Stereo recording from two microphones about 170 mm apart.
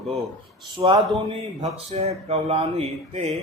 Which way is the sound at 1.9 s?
40° right (ahead or behind).